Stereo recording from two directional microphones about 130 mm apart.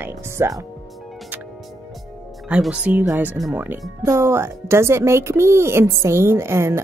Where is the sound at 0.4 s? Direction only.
25° right (ahead or behind).